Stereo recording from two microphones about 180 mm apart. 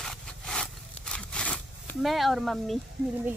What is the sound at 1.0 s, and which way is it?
Zipper, 5° left (ahead or behind).